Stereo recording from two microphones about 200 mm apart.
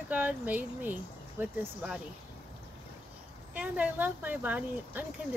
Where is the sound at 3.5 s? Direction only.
5° right (ahead or behind).